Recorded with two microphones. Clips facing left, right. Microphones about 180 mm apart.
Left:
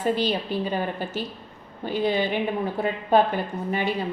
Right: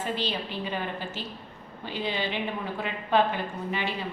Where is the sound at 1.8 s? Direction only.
45° left (ahead or behind).